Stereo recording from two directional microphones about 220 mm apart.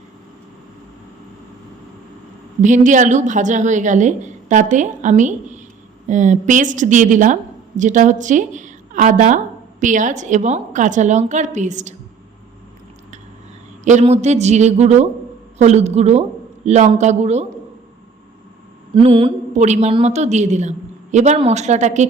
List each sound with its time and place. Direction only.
2.6 s a woman's voice: 35° right (ahead or behind)
13.8 s a woman's voice: 30° right (ahead or behind)
18.9 s a woman's voice: 25° right (ahead or behind)